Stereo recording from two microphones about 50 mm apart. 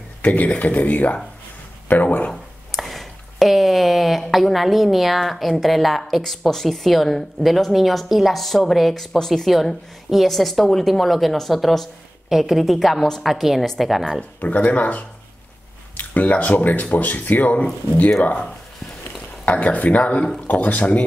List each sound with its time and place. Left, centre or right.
0.2 s speech: left
2.7 s speech: centre
14.4 s speech: left
19.4 s speech: left